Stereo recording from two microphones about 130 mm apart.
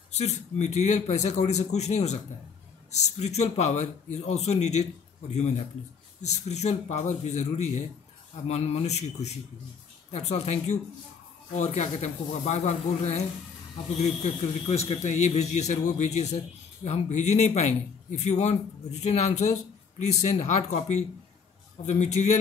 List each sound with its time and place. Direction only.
0.1 s speech: 60° left (ahead or behind)
14.2 s speech: 55° left (ahead or behind)